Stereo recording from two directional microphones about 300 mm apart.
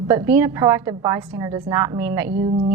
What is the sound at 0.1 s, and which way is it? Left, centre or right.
A woman's voice, centre.